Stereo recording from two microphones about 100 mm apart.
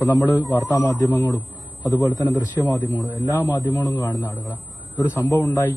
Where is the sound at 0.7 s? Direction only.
35° left (ahead or behind).